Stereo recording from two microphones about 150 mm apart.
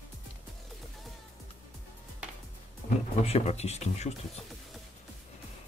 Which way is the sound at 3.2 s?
45° left (ahead or behind).